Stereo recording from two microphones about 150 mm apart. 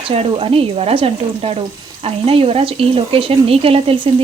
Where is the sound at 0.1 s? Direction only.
40° right (ahead or behind).